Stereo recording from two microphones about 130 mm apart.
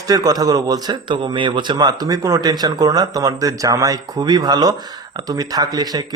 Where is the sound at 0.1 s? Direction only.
30° right (ahead or behind).